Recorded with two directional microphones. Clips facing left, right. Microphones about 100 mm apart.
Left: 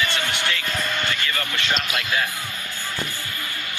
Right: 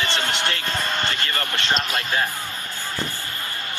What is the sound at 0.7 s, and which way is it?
Speech, 35° right (ahead or behind).